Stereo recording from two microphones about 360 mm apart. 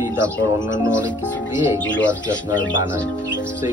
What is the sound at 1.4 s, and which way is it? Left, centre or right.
Speech, centre.